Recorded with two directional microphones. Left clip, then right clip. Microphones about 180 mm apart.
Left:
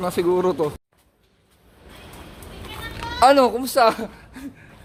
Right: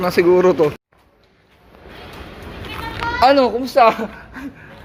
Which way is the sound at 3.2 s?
35° left (ahead or behind).